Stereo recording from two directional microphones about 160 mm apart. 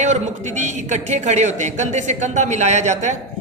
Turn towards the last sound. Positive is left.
turn(degrees=-50)  # may be behind; listen again after turning